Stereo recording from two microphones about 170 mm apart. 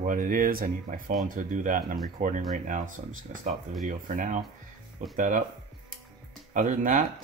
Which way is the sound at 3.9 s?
50° right (ahead or behind).